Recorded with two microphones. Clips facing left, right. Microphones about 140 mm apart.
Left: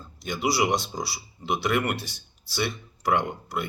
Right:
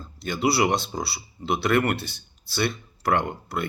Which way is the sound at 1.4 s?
20° left (ahead or behind).